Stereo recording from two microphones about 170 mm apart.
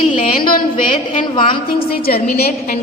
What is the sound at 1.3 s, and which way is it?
Speech, 30° left (ahead or behind).